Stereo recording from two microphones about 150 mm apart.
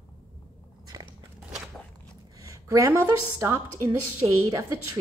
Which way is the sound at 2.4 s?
20° right (ahead or behind).